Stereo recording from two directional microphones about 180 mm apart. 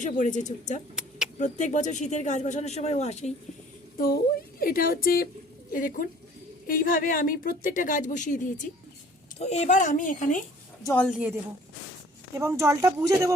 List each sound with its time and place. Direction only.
0.0 s a woman's voice: 40° left (ahead or behind)
3.9 s a woman's voice: 55° left (ahead or behind)
10.8 s a woman's voice: 10° left (ahead or behind)
11.1 s speech: 10° right (ahead or behind)